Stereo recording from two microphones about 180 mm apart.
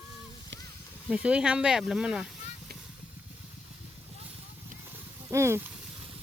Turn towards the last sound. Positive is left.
turn(degrees=-15)  # may be behind; listen again after turning